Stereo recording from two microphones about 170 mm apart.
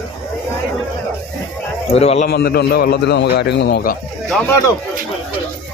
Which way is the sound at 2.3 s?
70° left (ahead or behind).